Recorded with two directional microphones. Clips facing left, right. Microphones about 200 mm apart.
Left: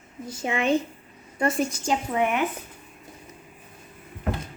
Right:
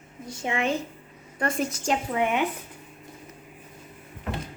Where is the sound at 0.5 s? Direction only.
25° left (ahead or behind).